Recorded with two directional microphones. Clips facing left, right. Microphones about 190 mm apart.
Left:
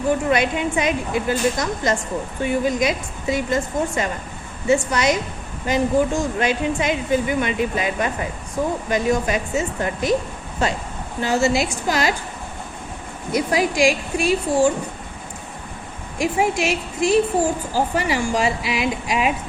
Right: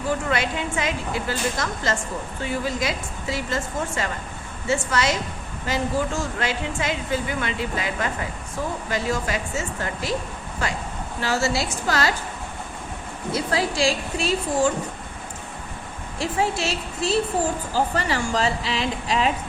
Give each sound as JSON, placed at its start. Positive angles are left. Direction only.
{"t": 0.3, "sound": "a woman's voice", "side_deg": 20}
{"t": 13.3, "sound": "a woman's voice", "side_deg": 15}
{"t": 16.1, "sound": "a woman's voice", "side_deg": 15}